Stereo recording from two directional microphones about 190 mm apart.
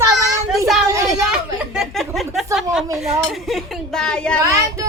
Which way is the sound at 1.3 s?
5° right (ahead or behind).